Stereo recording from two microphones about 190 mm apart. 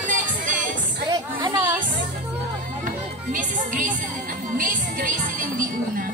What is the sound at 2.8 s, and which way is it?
Music, 45° right (ahead or behind).